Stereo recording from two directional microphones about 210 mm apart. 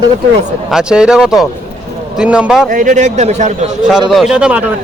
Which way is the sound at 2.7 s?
40° right (ahead or behind).